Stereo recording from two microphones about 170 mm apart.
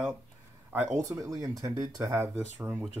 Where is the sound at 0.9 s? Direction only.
20° right (ahead or behind).